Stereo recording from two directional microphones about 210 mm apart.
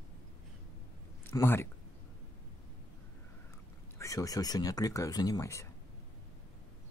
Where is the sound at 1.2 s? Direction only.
10° left (ahead or behind).